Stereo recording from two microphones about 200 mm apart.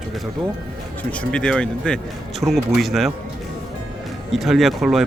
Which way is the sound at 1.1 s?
5° left (ahead or behind).